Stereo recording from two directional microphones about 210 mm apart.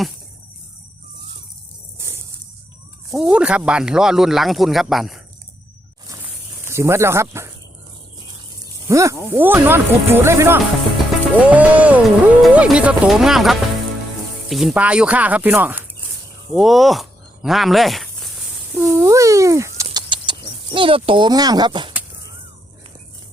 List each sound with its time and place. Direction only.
3.2 s speech: 5° right (ahead or behind)
6.7 s speech: 10° right (ahead or behind)
8.9 s speech: 15° right (ahead or behind)
18.7 s a sound: 10° right (ahead or behind)